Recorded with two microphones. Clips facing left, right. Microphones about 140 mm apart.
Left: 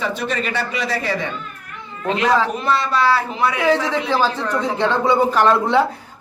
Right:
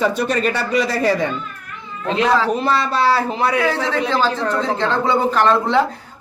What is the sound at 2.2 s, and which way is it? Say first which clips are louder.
A man's voice: right 2 dB; 30° right (ahead or behind).